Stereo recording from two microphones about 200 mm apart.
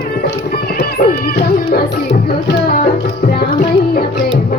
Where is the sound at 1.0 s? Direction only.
50° left (ahead or behind).